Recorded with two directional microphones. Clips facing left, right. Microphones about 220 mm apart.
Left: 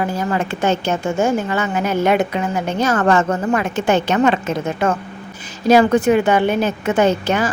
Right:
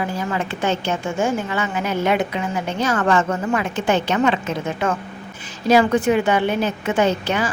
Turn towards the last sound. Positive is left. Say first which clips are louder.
# left 3 dB
turn(degrees=45)  # may be behind; listen again after turning